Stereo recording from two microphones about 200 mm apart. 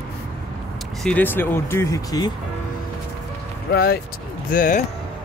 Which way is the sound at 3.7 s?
50° left (ahead or behind).